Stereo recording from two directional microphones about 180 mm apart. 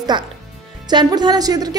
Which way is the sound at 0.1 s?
25° right (ahead or behind).